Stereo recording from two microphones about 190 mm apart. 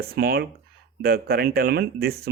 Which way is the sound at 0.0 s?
55° right (ahead or behind).